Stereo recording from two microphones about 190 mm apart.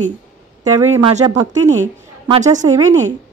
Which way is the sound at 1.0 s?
25° right (ahead or behind).